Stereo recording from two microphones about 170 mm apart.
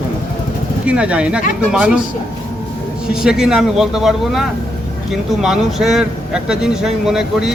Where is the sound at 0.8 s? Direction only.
5° right (ahead or behind).